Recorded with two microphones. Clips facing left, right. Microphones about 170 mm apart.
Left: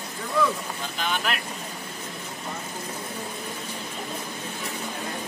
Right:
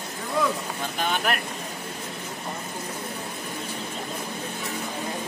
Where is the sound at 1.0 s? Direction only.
50° right (ahead or behind).